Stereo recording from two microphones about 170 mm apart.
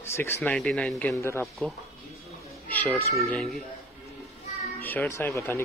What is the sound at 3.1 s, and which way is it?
Speech, centre (ahead or behind).